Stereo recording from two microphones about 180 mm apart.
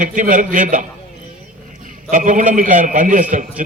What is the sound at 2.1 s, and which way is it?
A man's voice, 45° right (ahead or behind).